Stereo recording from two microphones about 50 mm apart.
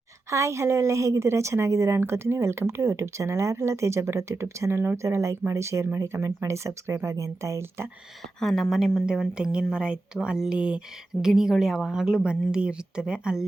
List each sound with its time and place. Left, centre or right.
0.3 s speech: right
2.0 s speech: right
8.4 s speech: centre
9.0 s speech: centre